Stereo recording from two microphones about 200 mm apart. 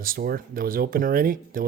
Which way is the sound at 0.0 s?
50° right (ahead or behind).